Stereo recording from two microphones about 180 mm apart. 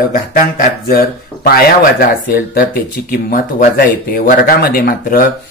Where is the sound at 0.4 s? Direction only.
55° left (ahead or behind).